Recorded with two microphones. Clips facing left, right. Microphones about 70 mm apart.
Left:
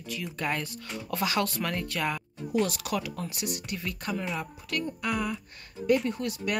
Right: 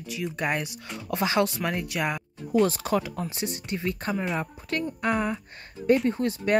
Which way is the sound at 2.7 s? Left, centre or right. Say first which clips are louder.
Right 5 dB; right.